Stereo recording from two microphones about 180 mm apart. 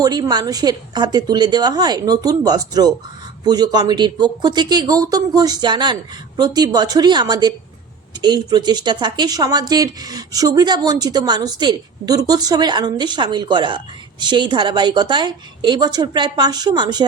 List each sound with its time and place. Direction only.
0.0 s speech: 20° right (ahead or behind)